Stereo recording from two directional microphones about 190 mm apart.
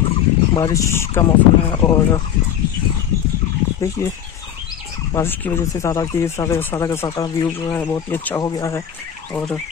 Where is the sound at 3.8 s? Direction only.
15° left (ahead or behind).